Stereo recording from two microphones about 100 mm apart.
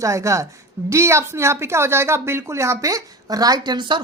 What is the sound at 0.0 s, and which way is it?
A woman's voice, 30° right (ahead or behind).